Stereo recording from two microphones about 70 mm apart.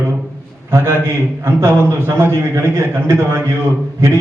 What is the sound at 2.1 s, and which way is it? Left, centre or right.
Speech, right.